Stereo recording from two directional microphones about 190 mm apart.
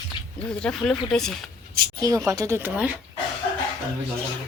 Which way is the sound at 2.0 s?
15° right (ahead or behind).